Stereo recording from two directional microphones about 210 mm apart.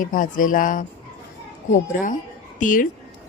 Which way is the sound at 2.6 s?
40° left (ahead or behind).